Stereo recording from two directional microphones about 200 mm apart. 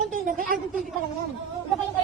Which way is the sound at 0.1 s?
45° right (ahead or behind).